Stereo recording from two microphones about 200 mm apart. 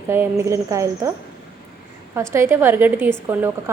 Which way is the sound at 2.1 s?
15° right (ahead or behind).